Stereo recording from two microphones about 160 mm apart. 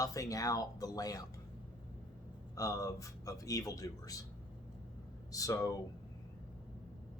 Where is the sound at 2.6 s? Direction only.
20° left (ahead or behind).